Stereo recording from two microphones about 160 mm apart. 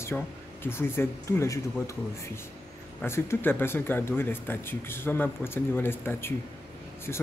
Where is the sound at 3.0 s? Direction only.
15° left (ahead or behind).